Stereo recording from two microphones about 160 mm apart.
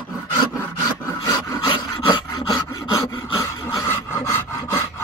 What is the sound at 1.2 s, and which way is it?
Filing, 25° left (ahead or behind).